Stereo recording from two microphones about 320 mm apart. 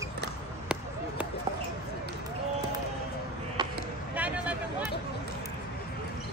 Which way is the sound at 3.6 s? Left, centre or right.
Centre.